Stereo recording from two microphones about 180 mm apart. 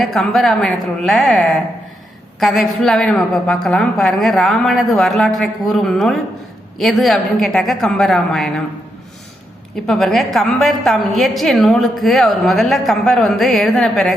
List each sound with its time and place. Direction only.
0.0 s a woman's voice: centre (ahead or behind)
9.8 s a woman's voice: centre (ahead or behind)